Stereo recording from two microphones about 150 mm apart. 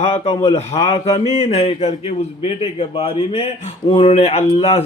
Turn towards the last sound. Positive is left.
turn(degrees=45)  # may be behind; listen again after turning